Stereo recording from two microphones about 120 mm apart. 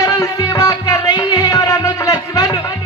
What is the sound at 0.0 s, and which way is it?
Music, 30° left (ahead or behind).